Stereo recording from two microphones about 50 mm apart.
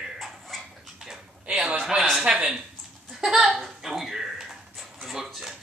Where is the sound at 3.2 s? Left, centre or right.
Centre.